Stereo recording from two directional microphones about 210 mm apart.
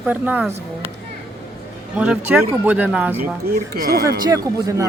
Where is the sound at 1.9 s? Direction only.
5° right (ahead or behind).